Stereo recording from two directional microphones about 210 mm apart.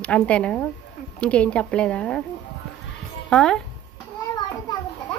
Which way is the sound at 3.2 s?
5° left (ahead or behind).